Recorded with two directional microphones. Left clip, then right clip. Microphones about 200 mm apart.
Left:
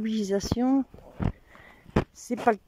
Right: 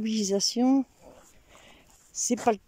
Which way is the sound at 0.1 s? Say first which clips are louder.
Right 2 dB; 5° right (ahead or behind).